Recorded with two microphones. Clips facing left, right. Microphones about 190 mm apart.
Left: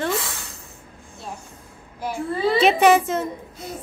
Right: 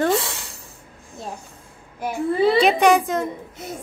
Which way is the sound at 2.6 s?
5° left (ahead or behind).